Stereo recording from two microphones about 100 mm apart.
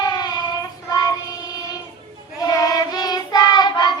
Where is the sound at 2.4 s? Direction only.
35° left (ahead or behind).